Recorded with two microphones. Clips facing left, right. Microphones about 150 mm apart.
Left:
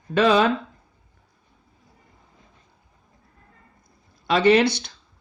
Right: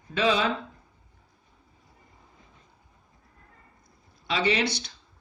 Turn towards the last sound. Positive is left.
turn(degrees=55)  # may be behind; listen again after turning